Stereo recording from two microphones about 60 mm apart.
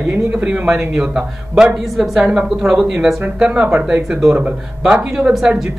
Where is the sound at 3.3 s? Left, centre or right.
Centre.